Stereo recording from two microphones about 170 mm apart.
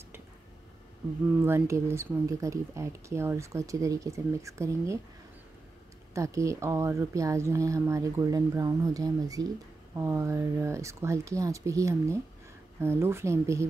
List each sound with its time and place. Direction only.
1.4 s speech: 15° right (ahead or behind)
6.1 s speech: 20° right (ahead or behind)